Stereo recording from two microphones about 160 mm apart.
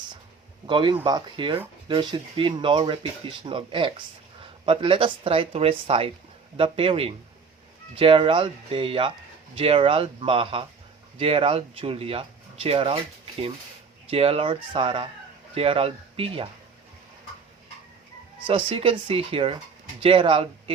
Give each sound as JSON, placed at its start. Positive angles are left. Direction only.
{"t": 0.7, "sound": "speech", "side_deg": -30}
{"t": 14.1, "sound": "speech", "side_deg": -35}
{"t": 18.4, "sound": "speech", "side_deg": -35}